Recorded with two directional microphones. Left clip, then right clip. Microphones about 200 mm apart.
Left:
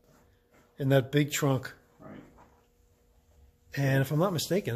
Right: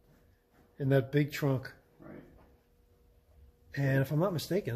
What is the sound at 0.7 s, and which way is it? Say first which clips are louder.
Speech: left 3 dB; 15° left (ahead or behind).